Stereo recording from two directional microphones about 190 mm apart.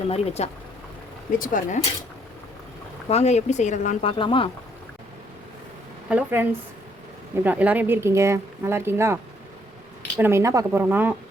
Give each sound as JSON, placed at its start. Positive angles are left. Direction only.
{"t": 0.1, "sound": "speech", "side_deg": 35}
{"t": 1.4, "sound": "speech", "side_deg": 45}
{"t": 3.1, "sound": "speech", "side_deg": 35}
{"t": 4.2, "sound": "speech", "side_deg": 25}
{"t": 6.1, "sound": "speech", "side_deg": -10}
{"t": 10.2, "sound": "speech", "side_deg": -15}